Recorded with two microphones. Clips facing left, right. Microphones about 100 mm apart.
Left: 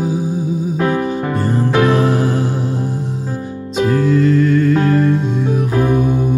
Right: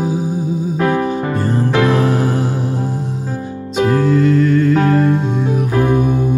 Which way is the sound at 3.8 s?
20° right (ahead or behind).